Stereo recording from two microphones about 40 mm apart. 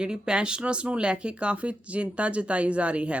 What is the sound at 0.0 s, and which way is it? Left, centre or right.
Speech, right.